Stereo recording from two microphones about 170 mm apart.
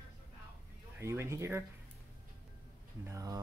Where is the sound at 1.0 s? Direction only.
15° right (ahead or behind).